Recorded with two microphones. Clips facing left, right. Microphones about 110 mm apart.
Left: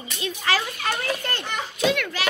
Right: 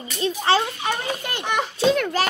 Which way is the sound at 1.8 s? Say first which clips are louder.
Right 3 dB; 35° right (ahead or behind).